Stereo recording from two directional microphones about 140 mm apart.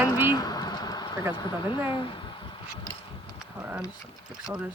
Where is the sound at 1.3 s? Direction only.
30° left (ahead or behind).